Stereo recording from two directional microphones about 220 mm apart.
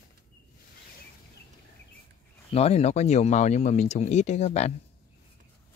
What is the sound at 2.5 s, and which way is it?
Speech, 30° left (ahead or behind).